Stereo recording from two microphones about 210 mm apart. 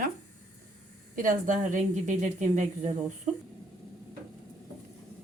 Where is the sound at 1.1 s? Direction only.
40° right (ahead or behind).